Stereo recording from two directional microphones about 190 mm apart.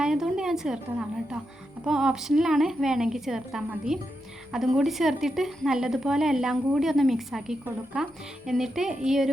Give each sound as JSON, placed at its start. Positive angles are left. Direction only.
{"t": 0.0, "sound": "a woman's voice", "side_deg": -5}